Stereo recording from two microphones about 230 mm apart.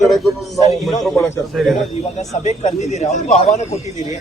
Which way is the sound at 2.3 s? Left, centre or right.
Left.